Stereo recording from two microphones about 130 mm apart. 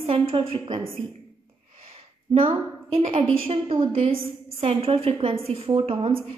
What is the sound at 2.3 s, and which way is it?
A woman's voice, 45° right (ahead or behind).